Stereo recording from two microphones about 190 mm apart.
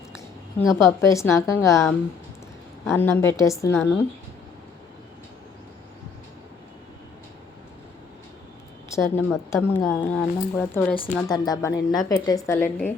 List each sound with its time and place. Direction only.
0.6 s a woman's voice: 15° left (ahead or behind)
8.9 s a woman's voice: 15° left (ahead or behind)
10.9 s a woman's voice: 25° left (ahead or behind)
12.5 s a woman's voice: 10° left (ahead or behind)